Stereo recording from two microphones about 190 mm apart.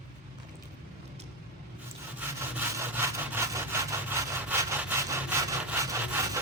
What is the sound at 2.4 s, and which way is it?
Sawing, 10° right (ahead or behind).